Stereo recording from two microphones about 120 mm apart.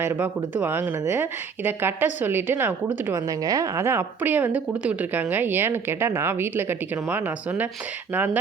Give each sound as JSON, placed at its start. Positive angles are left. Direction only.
{"t": 0.0, "sound": "a woman's voice", "side_deg": -15}
{"t": 3.1, "sound": "a woman's voice", "side_deg": -30}